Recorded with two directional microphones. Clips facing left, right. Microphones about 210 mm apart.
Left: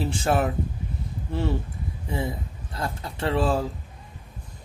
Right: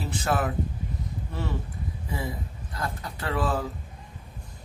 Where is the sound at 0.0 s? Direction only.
30° left (ahead or behind).